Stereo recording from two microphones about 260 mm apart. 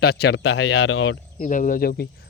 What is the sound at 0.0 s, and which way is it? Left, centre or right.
Speech, left.